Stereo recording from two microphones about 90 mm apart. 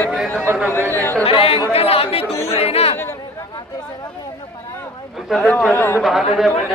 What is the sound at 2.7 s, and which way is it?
Chatter, 90° left.